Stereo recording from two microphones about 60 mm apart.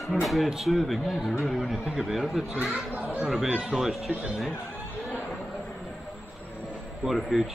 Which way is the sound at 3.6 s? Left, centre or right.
Centre.